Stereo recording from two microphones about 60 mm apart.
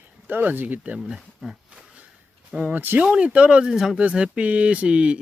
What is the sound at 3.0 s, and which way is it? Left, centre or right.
Speech, centre.